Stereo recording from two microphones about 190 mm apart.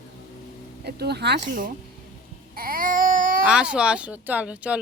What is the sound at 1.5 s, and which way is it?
Speech, 45° right (ahead or behind).